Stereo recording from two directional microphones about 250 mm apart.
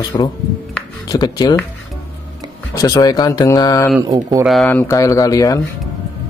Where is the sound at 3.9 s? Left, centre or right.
Centre.